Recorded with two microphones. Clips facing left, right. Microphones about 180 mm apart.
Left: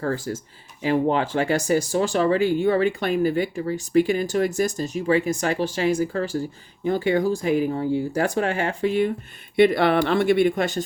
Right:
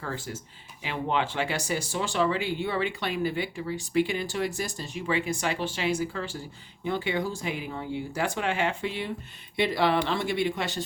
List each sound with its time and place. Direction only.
0.0 s speech: 45° left (ahead or behind)